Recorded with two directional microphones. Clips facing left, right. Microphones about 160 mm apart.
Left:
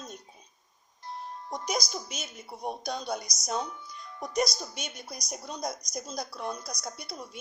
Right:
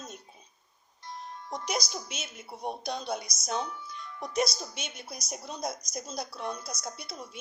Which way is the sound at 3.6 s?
35° left (ahead or behind).